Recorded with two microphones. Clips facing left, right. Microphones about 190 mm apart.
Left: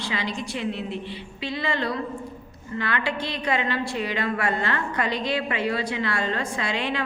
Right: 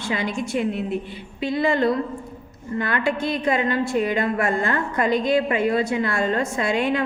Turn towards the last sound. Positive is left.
turn(degrees=-50)  # may be behind; listen again after turning